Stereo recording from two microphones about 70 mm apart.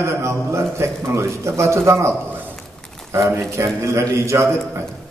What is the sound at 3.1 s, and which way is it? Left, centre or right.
A man's voice, right.